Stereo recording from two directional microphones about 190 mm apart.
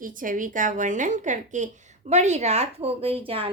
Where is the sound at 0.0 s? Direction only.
45° right (ahead or behind).